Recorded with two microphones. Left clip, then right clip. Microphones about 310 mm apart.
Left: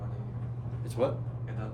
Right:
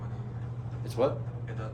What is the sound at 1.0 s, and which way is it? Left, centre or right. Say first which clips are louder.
Speech: right 2 dB; centre.